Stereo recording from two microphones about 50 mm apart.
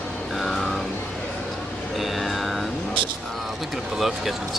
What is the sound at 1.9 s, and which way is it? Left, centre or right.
Music, centre.